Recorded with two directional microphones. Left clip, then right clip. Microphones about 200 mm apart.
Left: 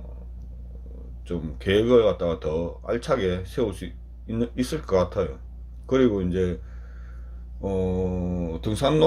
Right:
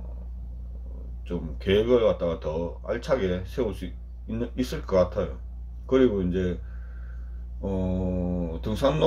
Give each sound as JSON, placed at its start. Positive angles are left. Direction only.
{"t": 1.2, "sound": "speech", "side_deg": 40}
{"t": 7.6, "sound": "speech", "side_deg": 35}